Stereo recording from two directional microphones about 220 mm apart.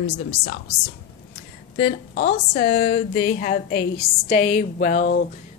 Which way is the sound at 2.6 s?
40° left (ahead or behind).